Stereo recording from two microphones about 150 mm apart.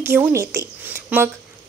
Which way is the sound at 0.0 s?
15° right (ahead or behind).